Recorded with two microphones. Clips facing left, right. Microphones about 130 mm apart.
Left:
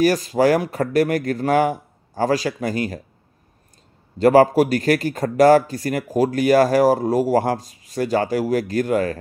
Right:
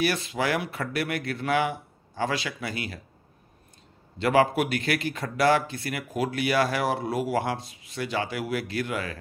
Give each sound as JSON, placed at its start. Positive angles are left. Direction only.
{"t": 0.0, "sound": "speech", "side_deg": 40}
{"t": 4.2, "sound": "speech", "side_deg": 40}